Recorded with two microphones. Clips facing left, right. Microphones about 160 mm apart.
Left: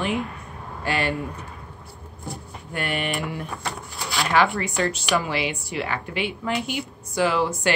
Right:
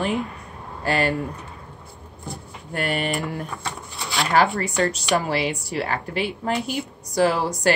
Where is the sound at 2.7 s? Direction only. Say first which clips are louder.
Right 2 dB; 40° right (ahead or behind).